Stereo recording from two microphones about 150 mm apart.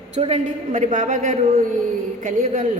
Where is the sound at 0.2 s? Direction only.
50° right (ahead or behind).